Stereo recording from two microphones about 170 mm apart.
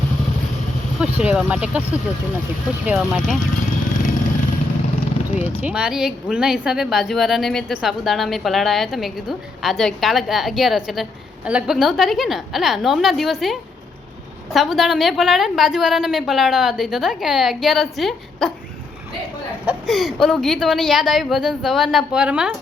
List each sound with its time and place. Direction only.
0.9 s a woman's voice: 10° right (ahead or behind)
5.4 s a woman's voice: 5° right (ahead or behind)
19.6 s a woman's voice: centre (ahead or behind)